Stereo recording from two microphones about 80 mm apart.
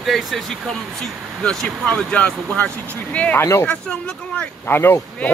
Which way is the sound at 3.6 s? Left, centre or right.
Centre.